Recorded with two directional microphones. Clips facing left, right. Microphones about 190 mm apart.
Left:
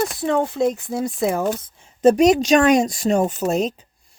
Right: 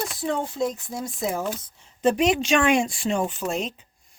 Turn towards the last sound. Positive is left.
turn(degrees=40)  # may be behind; listen again after turning